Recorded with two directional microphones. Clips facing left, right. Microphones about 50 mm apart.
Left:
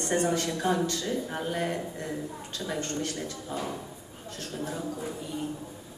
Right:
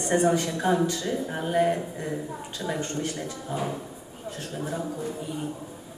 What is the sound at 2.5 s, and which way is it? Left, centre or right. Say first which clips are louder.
Speech: right 2 dB; centre.